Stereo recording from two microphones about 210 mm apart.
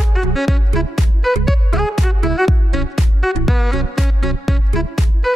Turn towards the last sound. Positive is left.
turn(degrees=0)  # may be behind; listen again after turning